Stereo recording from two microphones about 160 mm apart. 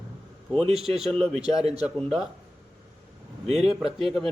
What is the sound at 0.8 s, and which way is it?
Speech, centre (ahead or behind).